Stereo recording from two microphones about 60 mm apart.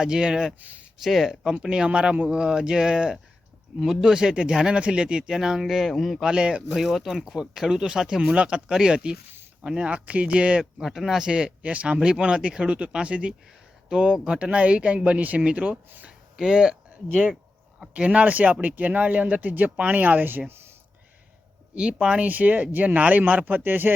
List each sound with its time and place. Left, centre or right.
0.0 s speech: centre
0.6 s speech: right
1.0 s speech: centre
6.7 s speech: centre
16.0 s a sound: centre
17.9 s speech: right
22.0 s speech: right